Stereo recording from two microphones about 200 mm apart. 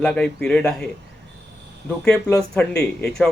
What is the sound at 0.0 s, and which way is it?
Speech, 5° left (ahead or behind).